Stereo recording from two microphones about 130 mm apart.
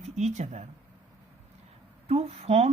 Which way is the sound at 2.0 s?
50° right (ahead or behind).